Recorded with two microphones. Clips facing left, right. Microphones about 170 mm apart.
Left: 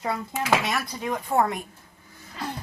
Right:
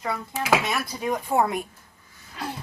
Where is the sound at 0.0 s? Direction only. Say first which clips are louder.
Left 1 dB; 25° left (ahead or behind).